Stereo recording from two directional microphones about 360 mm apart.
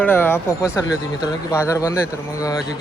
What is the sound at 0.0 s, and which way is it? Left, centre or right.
Speech, centre.